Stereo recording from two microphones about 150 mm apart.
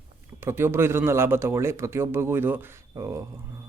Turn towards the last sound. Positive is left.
turn(degrees=-20)  # may be behind; listen again after turning